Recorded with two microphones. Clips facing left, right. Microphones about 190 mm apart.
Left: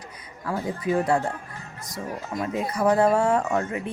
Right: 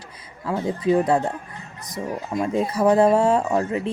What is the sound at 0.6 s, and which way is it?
Speech, 25° right (ahead or behind).